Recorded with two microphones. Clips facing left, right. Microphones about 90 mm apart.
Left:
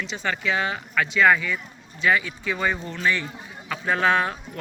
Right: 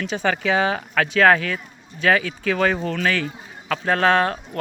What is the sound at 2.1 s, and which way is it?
Speech, 85° right.